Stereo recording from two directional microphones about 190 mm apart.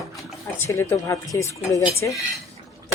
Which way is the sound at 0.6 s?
10° left (ahead or behind).